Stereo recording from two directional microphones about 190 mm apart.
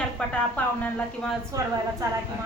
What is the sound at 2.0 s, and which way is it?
Speech, 20° right (ahead or behind).